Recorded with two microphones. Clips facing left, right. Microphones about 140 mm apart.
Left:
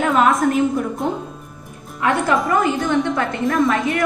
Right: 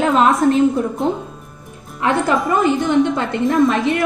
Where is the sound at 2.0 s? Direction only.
25° right (ahead or behind).